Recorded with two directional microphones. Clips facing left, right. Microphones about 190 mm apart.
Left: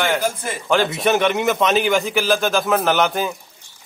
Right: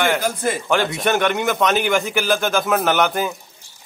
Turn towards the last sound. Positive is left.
turn(degrees=0)  # may be behind; listen again after turning